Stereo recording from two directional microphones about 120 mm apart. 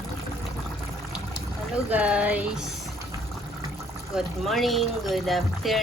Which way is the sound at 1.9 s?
10° right (ahead or behind).